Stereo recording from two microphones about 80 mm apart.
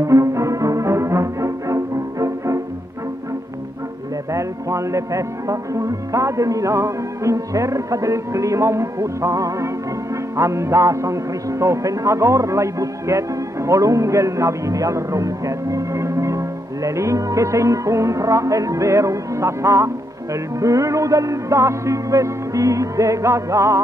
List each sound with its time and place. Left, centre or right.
0.0 s music: right
4.3 s music: right